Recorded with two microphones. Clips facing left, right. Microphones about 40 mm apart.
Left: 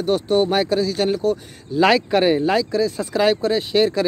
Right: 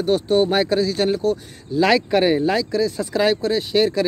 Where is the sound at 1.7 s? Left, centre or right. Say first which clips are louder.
Left 1 dB; centre.